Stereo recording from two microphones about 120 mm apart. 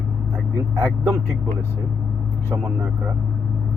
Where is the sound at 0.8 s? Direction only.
25° right (ahead or behind).